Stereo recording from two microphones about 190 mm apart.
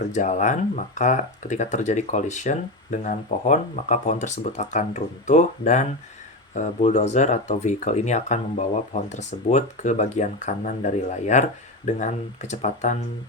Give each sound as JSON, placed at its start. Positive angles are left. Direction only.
{"t": 0.1, "sound": "speech", "side_deg": 40}